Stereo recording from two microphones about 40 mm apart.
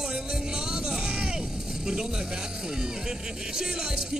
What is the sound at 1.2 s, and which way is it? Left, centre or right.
Speech, centre.